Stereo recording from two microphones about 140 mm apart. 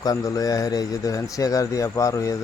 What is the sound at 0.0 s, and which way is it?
Speech, 25° left (ahead or behind).